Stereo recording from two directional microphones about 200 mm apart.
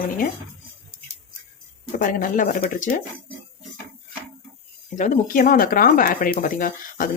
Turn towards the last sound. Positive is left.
turn(degrees=45)  # may be behind; listen again after turning